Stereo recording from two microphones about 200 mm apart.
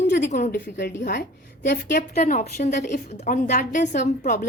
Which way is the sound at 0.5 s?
50° left (ahead or behind).